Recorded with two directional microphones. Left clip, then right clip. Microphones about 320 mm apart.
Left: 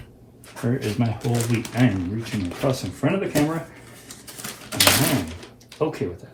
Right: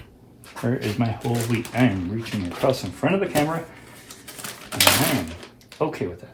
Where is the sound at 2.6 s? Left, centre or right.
Right.